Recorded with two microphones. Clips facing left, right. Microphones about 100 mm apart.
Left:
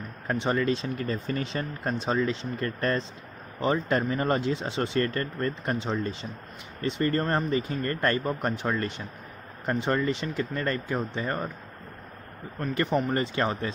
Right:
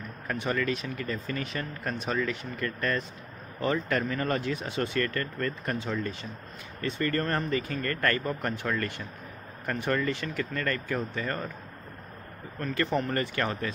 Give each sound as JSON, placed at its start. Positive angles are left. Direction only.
{"t": 0.3, "sound": "speech", "side_deg": 30}
{"t": 12.5, "sound": "speech", "side_deg": 15}